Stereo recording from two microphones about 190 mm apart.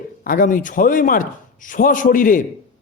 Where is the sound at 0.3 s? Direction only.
45° left (ahead or behind).